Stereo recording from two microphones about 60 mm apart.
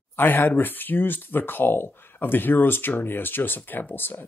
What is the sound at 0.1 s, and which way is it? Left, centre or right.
Speech, left.